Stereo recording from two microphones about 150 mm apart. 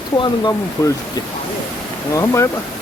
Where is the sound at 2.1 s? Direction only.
20° left (ahead or behind).